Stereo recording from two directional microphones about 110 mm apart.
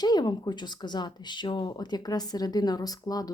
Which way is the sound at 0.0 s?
40° left (ahead or behind).